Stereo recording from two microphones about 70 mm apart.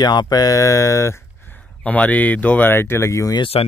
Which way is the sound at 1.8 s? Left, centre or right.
Centre.